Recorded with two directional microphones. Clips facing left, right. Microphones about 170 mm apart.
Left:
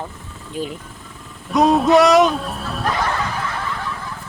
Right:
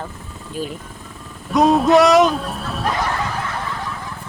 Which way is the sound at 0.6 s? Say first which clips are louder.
Left 1 dB; 20° left (ahead or behind).